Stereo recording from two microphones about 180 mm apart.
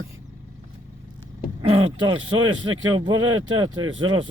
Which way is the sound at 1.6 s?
30° right (ahead or behind).